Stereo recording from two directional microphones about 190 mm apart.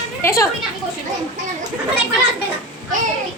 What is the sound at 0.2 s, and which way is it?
Speech, 15° left (ahead or behind).